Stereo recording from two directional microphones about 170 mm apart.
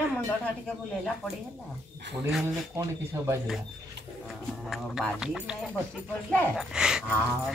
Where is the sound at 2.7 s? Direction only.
20° right (ahead or behind).